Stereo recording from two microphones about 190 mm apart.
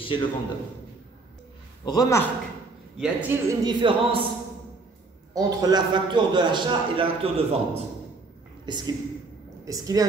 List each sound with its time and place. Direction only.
0.0 s a man's voice: 25° left (ahead or behind)
1.9 s a man's voice: 15° left (ahead or behind)
3.0 s a man's voice: 10° right (ahead or behind)
3.6 s a man's voice: 25° right (ahead or behind)
5.3 s a man's voice: 20° right (ahead or behind)